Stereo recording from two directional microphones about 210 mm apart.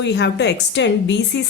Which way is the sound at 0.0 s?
55° left (ahead or behind).